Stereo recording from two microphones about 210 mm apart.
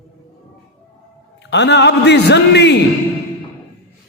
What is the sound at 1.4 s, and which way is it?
A man's voice, 55° left (ahead or behind).